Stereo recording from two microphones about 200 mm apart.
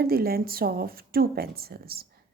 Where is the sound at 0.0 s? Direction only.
50° right (ahead or behind).